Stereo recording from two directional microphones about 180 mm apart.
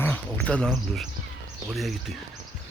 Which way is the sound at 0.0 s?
10° left (ahead or behind).